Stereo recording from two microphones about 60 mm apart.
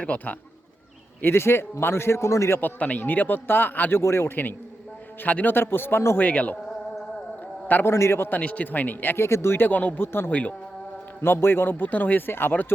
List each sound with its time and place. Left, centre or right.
0.0 s a man's voice: left
1.2 s a man's voice: left
2.6 s a man's voice: left
4.0 s a man's voice: left
5.2 s speech: left
6.1 s a man's voice: left
7.9 s a man's voice: left
8.4 s speech: left